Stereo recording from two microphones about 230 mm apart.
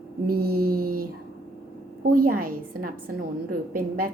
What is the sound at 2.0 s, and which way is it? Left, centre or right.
A woman's voice, right.